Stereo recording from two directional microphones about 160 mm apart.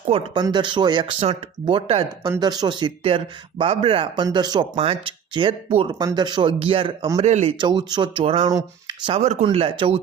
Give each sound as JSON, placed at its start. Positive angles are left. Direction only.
{"t": 0.1, "sound": "speech", "side_deg": -35}
{"t": 6.0, "sound": "speech", "side_deg": -25}
{"t": 7.6, "sound": "speech", "side_deg": -30}
{"t": 9.2, "sound": "speech", "side_deg": -40}